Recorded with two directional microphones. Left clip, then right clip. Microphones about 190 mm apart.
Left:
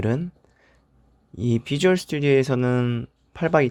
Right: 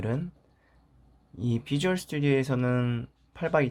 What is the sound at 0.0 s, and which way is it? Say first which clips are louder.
Speech: left 7 dB; 35° left (ahead or behind).